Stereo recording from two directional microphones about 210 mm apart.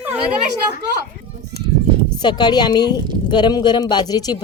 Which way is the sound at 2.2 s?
20° left (ahead or behind).